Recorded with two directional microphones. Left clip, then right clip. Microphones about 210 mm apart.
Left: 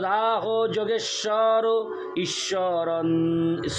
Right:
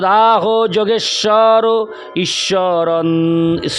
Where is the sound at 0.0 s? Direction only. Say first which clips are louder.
Right 13 dB; 55° right (ahead or behind).